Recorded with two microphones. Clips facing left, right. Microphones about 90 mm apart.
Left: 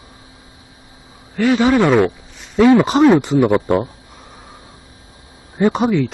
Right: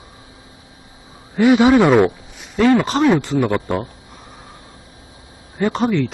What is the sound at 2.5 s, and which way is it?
Speech, 10° left (ahead or behind).